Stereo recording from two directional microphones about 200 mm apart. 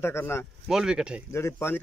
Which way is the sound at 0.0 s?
10° left (ahead or behind).